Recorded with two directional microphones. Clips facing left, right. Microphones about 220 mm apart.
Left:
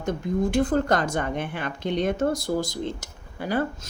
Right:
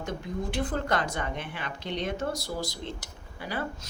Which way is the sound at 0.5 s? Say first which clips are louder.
Left 6 dB; 45° left (ahead or behind).